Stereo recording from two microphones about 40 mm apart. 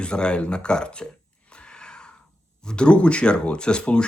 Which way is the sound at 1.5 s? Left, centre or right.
Left.